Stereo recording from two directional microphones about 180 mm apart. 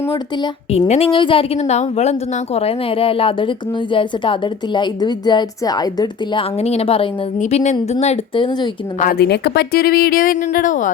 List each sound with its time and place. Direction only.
0.7 s a woman's voice: 35° left (ahead or behind)
6.6 s a woman's voice: 35° left (ahead or behind)
9.0 s speech: 55° left (ahead or behind)